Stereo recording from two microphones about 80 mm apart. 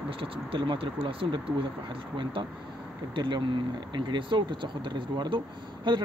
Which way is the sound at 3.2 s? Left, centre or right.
Right.